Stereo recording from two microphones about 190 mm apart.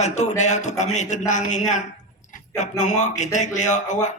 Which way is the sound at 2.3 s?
40° left (ahead or behind).